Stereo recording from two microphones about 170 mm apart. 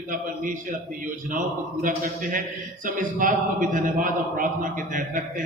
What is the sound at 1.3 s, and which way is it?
A man's voice, 50° right (ahead or behind).